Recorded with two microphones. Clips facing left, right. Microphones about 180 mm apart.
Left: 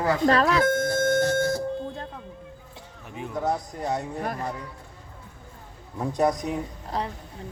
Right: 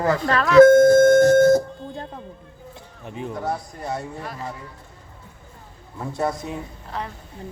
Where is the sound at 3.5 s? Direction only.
20° left (ahead or behind).